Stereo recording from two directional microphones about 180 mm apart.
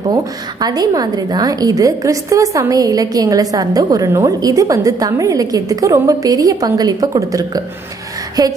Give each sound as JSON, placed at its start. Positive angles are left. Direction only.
{"t": 0.1, "sound": "a woman's voice", "side_deg": -20}